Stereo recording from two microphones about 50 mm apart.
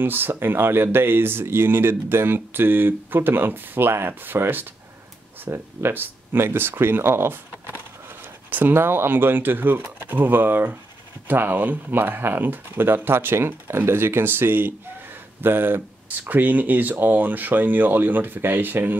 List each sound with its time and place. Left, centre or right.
0.0 s speech: right
8.5 s speech: right
8.7 s speech: right